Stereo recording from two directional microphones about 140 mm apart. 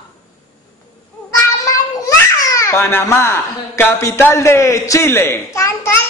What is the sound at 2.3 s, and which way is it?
A child's voice, 25° left (ahead or behind).